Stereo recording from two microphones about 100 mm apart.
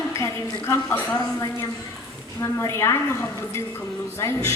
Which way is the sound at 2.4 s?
30° left (ahead or behind).